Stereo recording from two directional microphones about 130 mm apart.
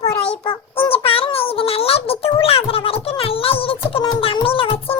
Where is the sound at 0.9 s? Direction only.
45° left (ahead or behind).